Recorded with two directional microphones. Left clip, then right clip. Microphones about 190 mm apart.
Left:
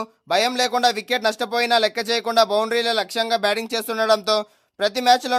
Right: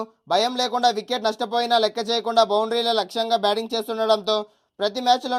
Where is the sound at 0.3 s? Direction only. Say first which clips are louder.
Left 2 dB; 15° left (ahead or behind).